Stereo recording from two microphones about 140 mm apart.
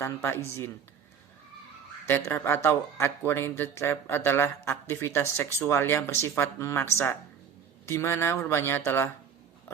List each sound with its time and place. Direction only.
0.0 s a man's voice: 15° left (ahead or behind)
2.0 s a man's voice: 15° left (ahead or behind)